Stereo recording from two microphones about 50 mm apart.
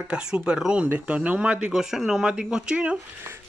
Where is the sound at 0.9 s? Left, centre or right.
Right.